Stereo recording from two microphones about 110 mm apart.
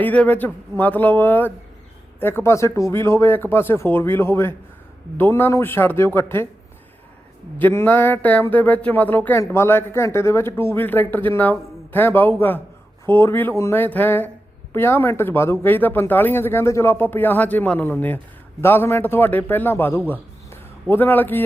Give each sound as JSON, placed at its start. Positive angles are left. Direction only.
{"t": 0.0, "sound": "speech", "side_deg": 15}
{"t": 7.6, "sound": "a man's voice", "side_deg": 20}